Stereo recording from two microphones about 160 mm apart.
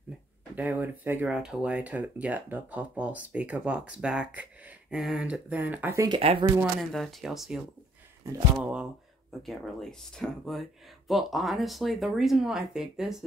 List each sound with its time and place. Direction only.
0.6 s speech: 10° right (ahead or behind)
6.0 s speech: 35° right (ahead or behind)
6.6 s speech: centre (ahead or behind)